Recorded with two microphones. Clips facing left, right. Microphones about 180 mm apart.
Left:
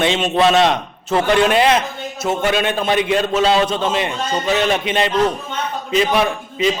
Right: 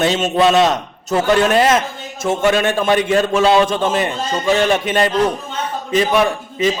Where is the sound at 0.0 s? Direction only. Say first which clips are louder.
Right 1 dB; 40° right (ahead or behind).